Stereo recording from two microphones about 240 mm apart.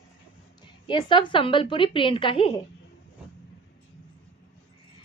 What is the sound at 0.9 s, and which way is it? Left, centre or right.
A woman's voice, centre.